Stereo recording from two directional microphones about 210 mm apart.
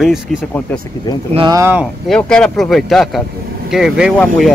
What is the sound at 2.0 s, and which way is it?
Speech, 5° left (ahead or behind).